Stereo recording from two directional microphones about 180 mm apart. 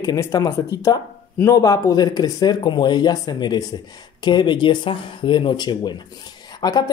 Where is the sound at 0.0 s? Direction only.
20° left (ahead or behind).